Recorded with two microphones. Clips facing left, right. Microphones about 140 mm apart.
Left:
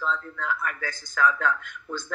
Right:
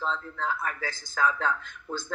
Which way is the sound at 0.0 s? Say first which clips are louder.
Left 1 dB; 30° right (ahead or behind).